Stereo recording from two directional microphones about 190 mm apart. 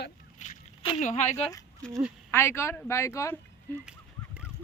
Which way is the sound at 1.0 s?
40° left (ahead or behind).